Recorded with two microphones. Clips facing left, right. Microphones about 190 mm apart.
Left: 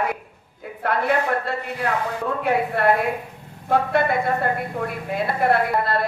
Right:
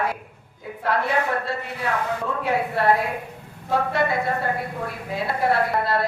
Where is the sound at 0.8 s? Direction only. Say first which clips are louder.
Left 2 dB; 55° left (ahead or behind).